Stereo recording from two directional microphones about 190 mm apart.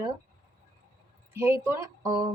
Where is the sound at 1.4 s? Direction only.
15° right (ahead or behind).